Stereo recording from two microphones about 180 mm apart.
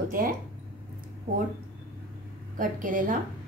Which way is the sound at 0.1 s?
50° right (ahead or behind).